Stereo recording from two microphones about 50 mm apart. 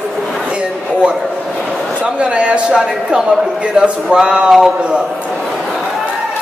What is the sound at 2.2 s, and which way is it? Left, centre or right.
A man's voice, right.